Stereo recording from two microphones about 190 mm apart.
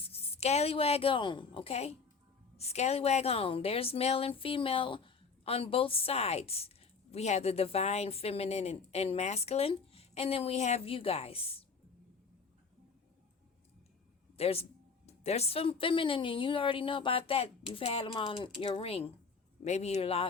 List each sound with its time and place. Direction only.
0.0 s speech: 30° left (ahead or behind)
14.3 s speech: 30° left (ahead or behind)